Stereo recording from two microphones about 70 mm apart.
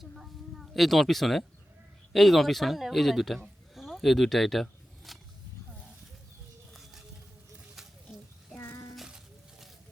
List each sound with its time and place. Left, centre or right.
0.0 s a man's voice: centre
8.5 s child singing: left
9.0 s a sound: centre